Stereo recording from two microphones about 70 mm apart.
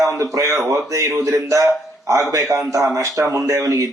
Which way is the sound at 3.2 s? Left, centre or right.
Right.